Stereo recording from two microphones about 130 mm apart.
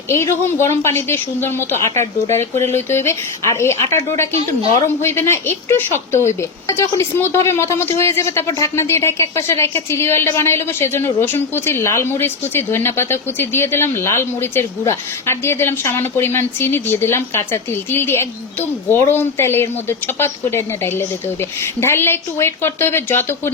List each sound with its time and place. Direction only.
0.1 s a woman's voice: 20° left (ahead or behind)